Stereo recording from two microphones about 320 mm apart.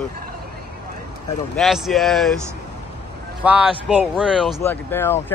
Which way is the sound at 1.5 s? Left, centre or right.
Centre.